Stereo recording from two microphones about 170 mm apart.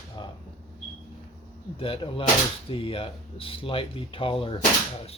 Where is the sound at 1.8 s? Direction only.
35° left (ahead or behind).